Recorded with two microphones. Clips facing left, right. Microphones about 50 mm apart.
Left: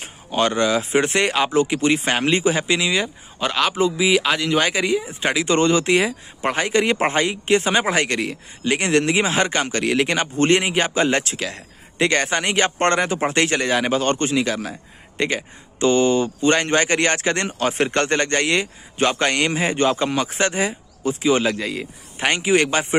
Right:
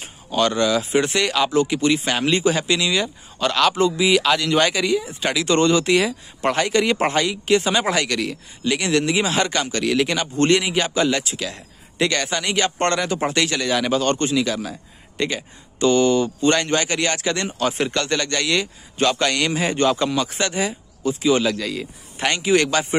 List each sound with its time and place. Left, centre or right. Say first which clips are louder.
0.0 s speech: even; left; by 4.8 s centre
4.8 s speech: even; left
6.4 s a man's voice: right 1 dB; centre
6.8 s speech: even; left